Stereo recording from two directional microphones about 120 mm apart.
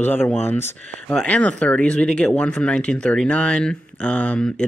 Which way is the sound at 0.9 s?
5° left (ahead or behind).